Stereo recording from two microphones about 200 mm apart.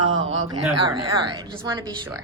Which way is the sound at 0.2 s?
25° right (ahead or behind).